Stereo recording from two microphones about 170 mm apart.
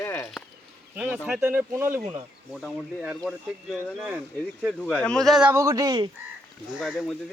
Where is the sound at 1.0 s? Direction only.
5° right (ahead or behind).